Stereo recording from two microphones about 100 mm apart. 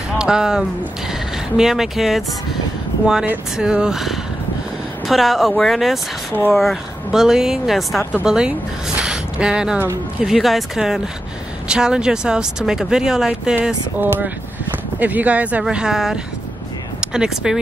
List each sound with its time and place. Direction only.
0.2 s speech: 5° right (ahead or behind)
3.5 s speech: 10° right (ahead or behind)
9.0 s gasp: 10° right (ahead or behind)
10.2 s speech: centre (ahead or behind)